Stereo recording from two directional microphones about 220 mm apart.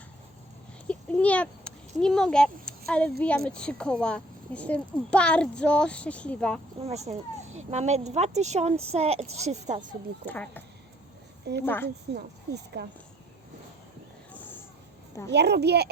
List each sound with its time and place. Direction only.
0.9 s a sound: 5° left (ahead or behind)
2.0 s speech: centre (ahead or behind)
6.8 s speech: 30° right (ahead or behind)
10.2 s speech: 5° left (ahead or behind)
11.6 s speech: 10° left (ahead or behind)
12.1 s a woman's voice: 50° right (ahead or behind)
15.3 s a woman's voice: 50° right (ahead or behind)